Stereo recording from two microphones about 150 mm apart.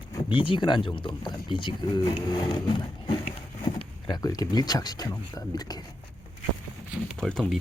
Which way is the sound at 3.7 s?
25° left (ahead or behind).